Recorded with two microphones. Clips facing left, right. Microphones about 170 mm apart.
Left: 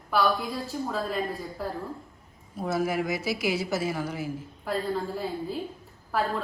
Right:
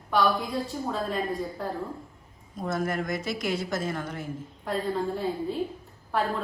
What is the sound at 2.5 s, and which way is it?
A woman's voice, 5° left (ahead or behind).